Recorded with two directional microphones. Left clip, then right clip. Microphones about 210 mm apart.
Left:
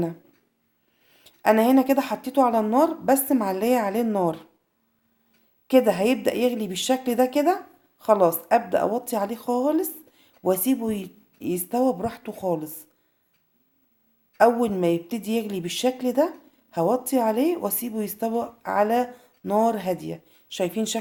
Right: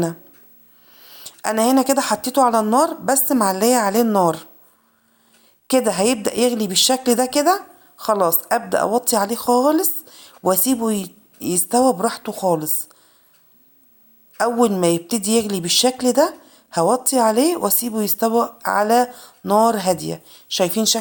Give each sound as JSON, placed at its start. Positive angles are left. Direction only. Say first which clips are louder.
{"t": 0.9, "sound": "a woman's voice", "louder": "right 14 dB", "side_deg": -15}
{"t": 5.6, "sound": "a woman's voice", "louder": "right 2 dB", "side_deg": -20}
{"t": 14.3, "sound": "a woman's voice", "louder": "right 2 dB", "side_deg": -15}